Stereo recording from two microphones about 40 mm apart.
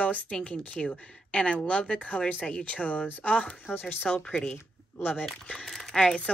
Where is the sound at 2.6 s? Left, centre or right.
Left.